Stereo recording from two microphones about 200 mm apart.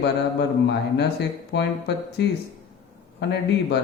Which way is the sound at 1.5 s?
60° left (ahead or behind).